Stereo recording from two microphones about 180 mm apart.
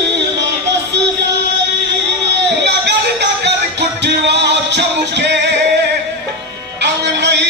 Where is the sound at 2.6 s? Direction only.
70° right (ahead or behind).